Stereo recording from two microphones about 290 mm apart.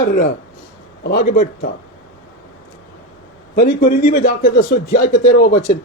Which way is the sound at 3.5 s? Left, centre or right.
Left.